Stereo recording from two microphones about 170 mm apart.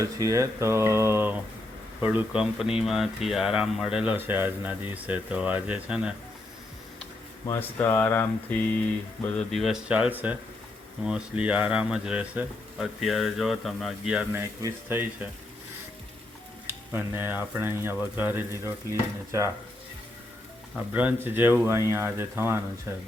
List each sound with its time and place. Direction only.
0.0 s speech: 20° right (ahead or behind)
7.4 s speech: 15° left (ahead or behind); by 14.4 s 5° right (ahead or behind)
14.4 s speech: 15° right (ahead or behind)
16.6 s stir: 15° right (ahead or behind)
17.9 s speech: 10° right (ahead or behind)
20.7 s speech: 10° right (ahead or behind)